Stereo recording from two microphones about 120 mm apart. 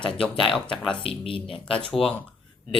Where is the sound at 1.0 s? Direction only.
50° left (ahead or behind).